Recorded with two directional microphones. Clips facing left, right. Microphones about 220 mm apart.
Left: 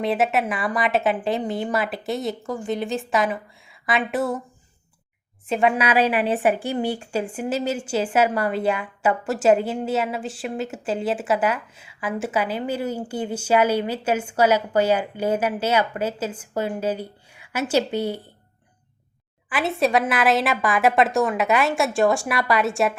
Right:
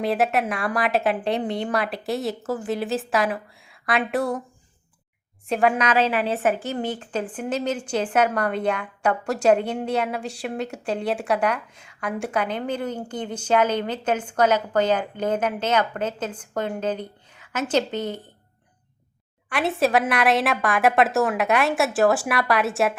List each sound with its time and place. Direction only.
0.0 s a woman's voice: centre (ahead or behind)
5.5 s a woman's voice: centre (ahead or behind)
19.5 s a woman's voice: centre (ahead or behind)